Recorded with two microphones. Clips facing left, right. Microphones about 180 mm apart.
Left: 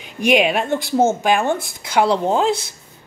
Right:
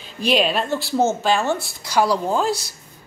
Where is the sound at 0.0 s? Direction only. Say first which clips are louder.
Left 3 dB; 15° left (ahead or behind).